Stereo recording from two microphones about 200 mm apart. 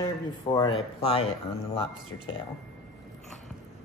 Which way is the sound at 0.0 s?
20° left (ahead or behind).